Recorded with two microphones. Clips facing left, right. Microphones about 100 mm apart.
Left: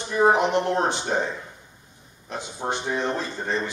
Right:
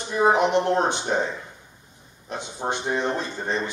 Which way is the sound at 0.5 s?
25° right (ahead or behind).